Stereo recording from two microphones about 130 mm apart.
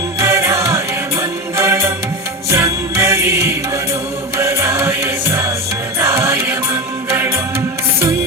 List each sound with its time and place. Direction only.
0.2 s music: 25° right (ahead or behind)